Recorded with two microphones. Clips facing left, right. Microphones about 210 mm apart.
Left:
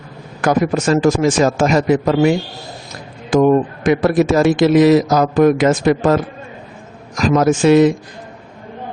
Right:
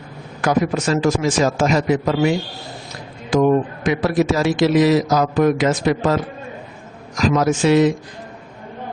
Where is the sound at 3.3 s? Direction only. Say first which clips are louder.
Left 3 dB; 50° left (ahead or behind).